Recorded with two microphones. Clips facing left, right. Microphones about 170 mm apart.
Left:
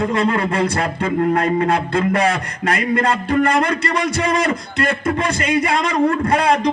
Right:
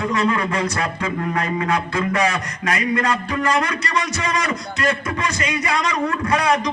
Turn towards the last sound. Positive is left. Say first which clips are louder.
# left 3 dB
turn(degrees=55)  # may be behind; listen again after turning